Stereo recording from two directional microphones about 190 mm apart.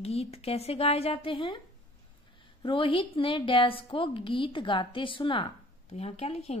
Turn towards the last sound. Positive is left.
turn(degrees=35)  # may be behind; listen again after turning